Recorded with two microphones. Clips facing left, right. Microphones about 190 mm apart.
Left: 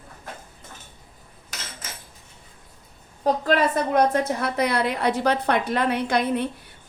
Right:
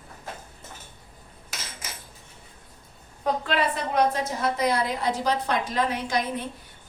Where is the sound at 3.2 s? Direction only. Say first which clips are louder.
Left 5 dB; 45° left (ahead or behind).